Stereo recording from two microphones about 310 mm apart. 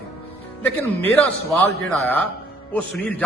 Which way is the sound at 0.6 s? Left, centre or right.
Centre.